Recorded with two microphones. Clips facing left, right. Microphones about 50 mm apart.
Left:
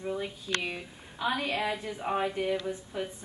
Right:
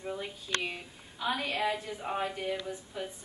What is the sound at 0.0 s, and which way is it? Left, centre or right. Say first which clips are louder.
A woman's voice: left 4 dB; centre.